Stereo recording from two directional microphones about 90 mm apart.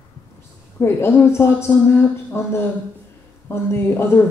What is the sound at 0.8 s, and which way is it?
Speech, 30° left (ahead or behind).